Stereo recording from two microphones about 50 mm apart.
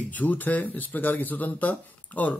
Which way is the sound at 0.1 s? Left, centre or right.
Left.